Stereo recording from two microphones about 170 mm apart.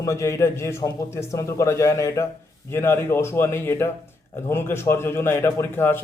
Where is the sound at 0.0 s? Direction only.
20° left (ahead or behind).